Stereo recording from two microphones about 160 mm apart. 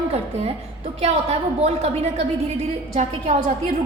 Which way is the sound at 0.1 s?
40° right (ahead or behind).